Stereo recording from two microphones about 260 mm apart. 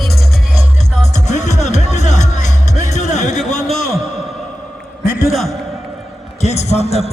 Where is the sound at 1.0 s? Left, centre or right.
Left.